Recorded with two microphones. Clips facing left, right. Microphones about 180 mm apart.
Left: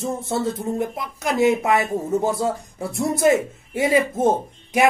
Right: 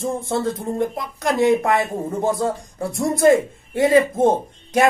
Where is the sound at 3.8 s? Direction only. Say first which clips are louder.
Right 4 dB; 10° left (ahead or behind).